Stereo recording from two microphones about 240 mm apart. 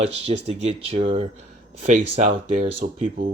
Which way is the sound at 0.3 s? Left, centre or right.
Right.